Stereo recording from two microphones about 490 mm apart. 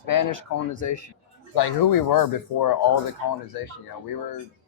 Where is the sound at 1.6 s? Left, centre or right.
Left.